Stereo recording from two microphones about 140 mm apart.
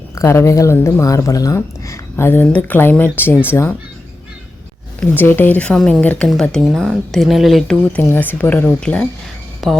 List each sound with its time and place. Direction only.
0.2 s speech: 20° left (ahead or behind)
4.9 s speech: 15° left (ahead or behind); by 9.8 s centre (ahead or behind)